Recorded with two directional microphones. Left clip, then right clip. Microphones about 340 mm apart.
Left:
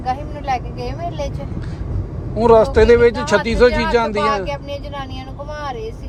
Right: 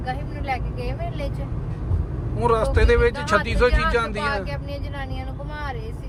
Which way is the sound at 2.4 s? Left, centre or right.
Centre.